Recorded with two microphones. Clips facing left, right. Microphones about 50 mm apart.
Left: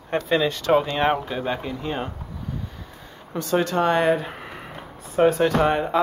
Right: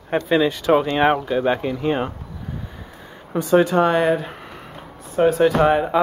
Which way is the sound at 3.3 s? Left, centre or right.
Centre.